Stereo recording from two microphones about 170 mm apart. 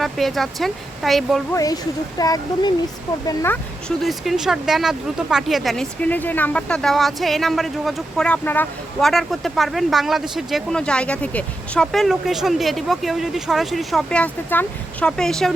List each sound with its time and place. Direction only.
0.0 s speech: centre (ahead or behind)
1.5 s speech: 20° left (ahead or behind)
3.2 s speech: 10° left (ahead or behind)
4.0 s speech: centre (ahead or behind)